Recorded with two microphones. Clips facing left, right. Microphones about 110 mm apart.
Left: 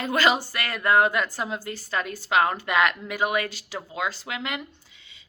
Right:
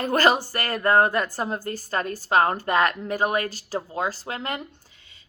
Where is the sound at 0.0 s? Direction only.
45° right (ahead or behind).